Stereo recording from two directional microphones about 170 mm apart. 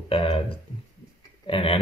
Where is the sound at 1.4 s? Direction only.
30° left (ahead or behind).